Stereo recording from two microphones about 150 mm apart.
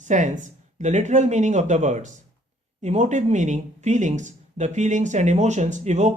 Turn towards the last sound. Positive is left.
turn(degrees=-50)  # may be behind; listen again after turning